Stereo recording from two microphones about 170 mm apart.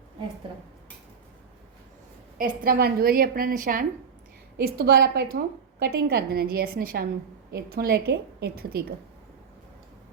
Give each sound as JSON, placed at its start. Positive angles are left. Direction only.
{"t": 2.4, "sound": "a woman's voice", "side_deg": -60}
{"t": 4.5, "sound": "a woman's voice", "side_deg": -70}
{"t": 7.5, "sound": "a woman's voice", "side_deg": -70}